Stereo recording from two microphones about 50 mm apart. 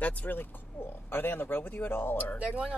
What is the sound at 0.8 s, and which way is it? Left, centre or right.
Speech, left.